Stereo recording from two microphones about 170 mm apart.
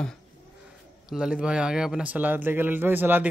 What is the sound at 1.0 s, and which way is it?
Speech, 5° right (ahead or behind).